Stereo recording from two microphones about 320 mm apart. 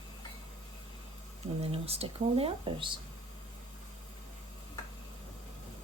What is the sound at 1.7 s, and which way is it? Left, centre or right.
Speech, centre.